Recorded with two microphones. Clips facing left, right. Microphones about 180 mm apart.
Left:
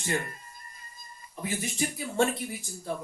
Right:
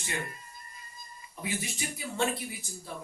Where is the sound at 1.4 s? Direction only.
45° left (ahead or behind).